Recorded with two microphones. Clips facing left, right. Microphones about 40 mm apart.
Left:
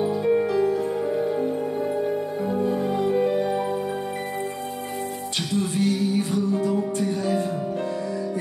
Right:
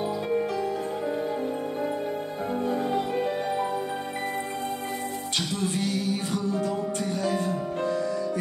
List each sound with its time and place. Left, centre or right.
0.3 s music: left
2.9 s music: right